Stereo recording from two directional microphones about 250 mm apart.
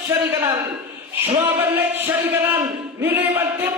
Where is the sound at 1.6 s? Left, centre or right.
Centre.